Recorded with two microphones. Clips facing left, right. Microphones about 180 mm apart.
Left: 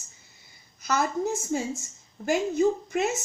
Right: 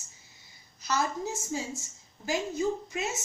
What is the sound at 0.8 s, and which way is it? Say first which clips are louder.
Speech: left 4 dB; 55° left (ahead or behind).